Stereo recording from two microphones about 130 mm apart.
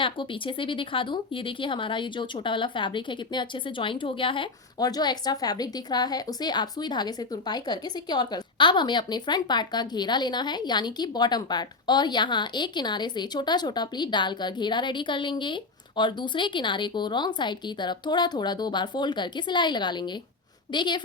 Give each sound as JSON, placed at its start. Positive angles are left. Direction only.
{"t": 0.0, "sound": "speech", "side_deg": 40}